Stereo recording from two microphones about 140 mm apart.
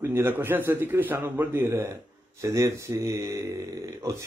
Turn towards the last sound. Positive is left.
turn(degrees=-25)  # may be behind; listen again after turning